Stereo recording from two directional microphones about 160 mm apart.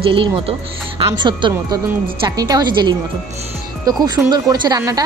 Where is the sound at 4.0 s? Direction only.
25° right (ahead or behind).